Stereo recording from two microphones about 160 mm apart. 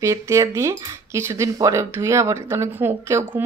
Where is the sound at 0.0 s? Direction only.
20° right (ahead or behind).